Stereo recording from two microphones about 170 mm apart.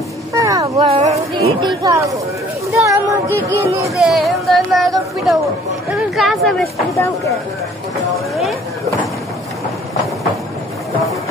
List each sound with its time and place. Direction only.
0.3 s a sound: 20° right (ahead or behind)
0.7 s speech: 35° right (ahead or behind)
1.8 s speech: 20° right (ahead or behind)
3.9 s speech: centre (ahead or behind)
6.9 s speech: 20° left (ahead or behind)